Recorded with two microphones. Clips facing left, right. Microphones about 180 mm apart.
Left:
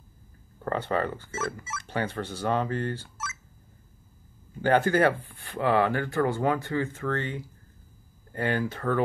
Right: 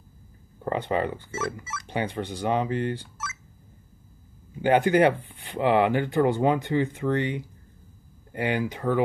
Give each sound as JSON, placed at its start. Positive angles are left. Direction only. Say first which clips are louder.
{"t": 0.7, "sound": "speech", "louder": "right 2 dB", "side_deg": -15}
{"t": 4.6, "sound": "speech", "louder": "right 3 dB", "side_deg": -15}